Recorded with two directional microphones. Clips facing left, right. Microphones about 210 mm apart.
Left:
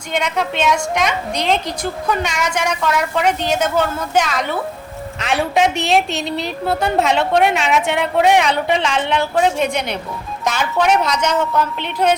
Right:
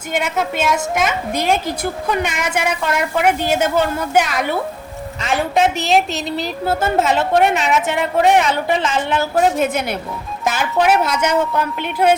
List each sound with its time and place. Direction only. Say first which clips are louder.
0.1 s a woman's voice: even; 5° right (ahead or behind)